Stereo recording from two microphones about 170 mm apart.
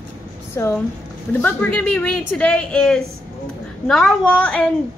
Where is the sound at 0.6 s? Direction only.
15° left (ahead or behind).